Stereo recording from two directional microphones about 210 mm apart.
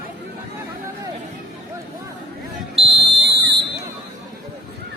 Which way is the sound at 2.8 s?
25° right (ahead or behind).